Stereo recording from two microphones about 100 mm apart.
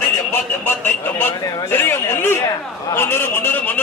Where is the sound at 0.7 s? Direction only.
20° left (ahead or behind).